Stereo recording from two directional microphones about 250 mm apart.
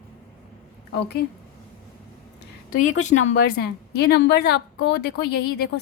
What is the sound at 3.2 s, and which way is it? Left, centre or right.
A woman's voice, left.